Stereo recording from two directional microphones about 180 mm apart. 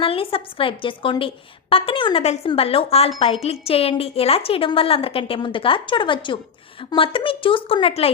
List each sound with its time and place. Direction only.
0.0 s a woman's voice: 30° left (ahead or behind)